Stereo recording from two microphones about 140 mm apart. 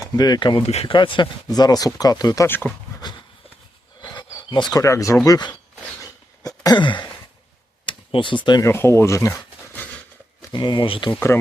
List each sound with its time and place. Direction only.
0.0 s speech: 30° left (ahead or behind)
0.7 s speech: 50° left (ahead or behind)
0.9 s speech: 35° left (ahead or behind)
2.5 s speech: 10° left (ahead or behind)
3.0 s a sound: 35° left (ahead or behind)
5.2 s speech: 30° left (ahead or behind)
6.6 s a sound: 30° left (ahead or behind)
7.9 s speech: 35° left (ahead or behind)
8.6 s speech: 20° left (ahead or behind)
10.5 s speech: 35° left (ahead or behind)